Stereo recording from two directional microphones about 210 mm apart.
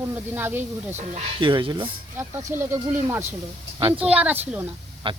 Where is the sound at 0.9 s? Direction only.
20° right (ahead or behind).